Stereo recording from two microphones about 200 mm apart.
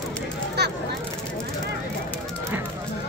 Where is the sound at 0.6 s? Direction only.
55° right (ahead or behind).